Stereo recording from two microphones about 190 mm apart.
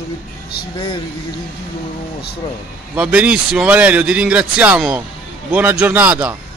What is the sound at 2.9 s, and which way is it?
Speech, 10° right (ahead or behind).